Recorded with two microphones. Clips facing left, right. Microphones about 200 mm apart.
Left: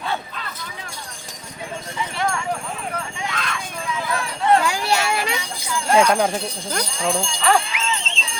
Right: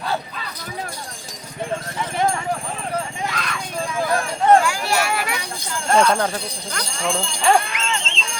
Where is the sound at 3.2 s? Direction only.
Centre (ahead or behind).